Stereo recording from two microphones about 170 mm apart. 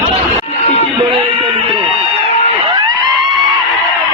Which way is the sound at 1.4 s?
35° right (ahead or behind).